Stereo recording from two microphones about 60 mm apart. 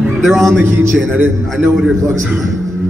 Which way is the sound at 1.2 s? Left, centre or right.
Right.